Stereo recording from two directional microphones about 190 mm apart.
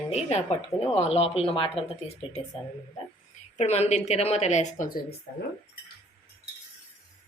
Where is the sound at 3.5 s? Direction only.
35° left (ahead or behind).